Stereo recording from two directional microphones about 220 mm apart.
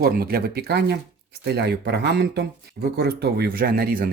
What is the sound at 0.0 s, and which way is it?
Speech, 45° right (ahead or behind).